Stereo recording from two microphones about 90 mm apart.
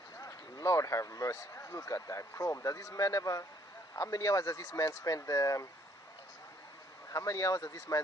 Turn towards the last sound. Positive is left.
turn(degrees=40)  # may be behind; listen again after turning